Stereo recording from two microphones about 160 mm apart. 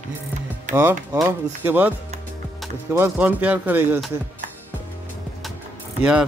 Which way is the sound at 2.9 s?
10° right (ahead or behind).